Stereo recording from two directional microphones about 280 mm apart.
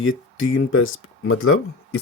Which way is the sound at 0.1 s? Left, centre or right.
Left.